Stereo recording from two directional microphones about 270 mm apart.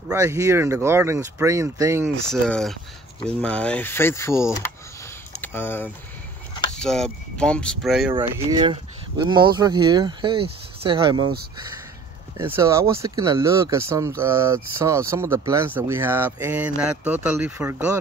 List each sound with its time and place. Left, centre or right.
0.1 s speech: centre
2.4 s speech: centre
8.1 s speech: centre
12.4 s speech: centre